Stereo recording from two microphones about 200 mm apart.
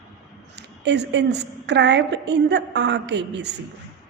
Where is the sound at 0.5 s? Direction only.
60° right (ahead or behind).